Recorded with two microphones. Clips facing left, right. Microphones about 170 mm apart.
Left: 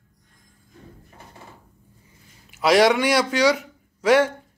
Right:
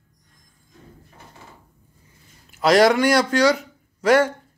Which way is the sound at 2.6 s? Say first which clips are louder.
Right 2 dB; 5° left (ahead or behind).